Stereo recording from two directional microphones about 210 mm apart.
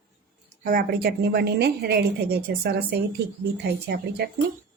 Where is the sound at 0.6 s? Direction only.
40° right (ahead or behind).